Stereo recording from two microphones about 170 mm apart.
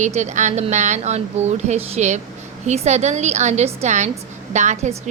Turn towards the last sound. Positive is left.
turn(degrees=-40)  # may be behind; listen again after turning